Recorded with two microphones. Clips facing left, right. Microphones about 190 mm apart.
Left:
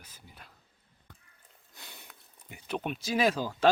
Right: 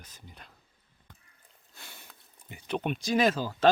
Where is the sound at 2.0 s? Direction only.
5° left (ahead or behind).